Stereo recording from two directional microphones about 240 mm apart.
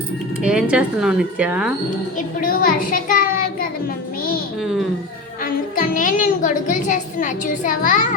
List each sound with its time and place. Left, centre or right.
0.4 s speech: centre
2.1 s a child's voice: left
4.2 s a sound: left
4.6 s speech: centre
5.4 s a woman's voice: left